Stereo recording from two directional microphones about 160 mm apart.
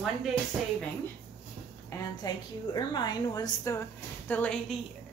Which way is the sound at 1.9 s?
25° left (ahead or behind).